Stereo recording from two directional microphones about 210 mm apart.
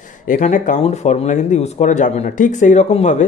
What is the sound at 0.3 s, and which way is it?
Speech, 35° left (ahead or behind).